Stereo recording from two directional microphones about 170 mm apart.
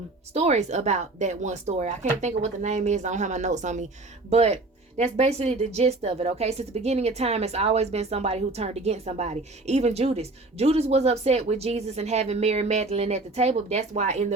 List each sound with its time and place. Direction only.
0.3 s speech: 40° right (ahead or behind)